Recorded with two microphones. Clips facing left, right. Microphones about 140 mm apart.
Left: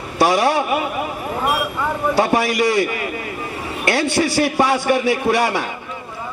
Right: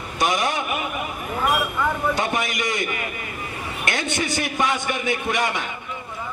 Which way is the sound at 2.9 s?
30° left (ahead or behind).